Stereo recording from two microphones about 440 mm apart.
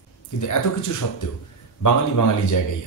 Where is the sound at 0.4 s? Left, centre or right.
Left.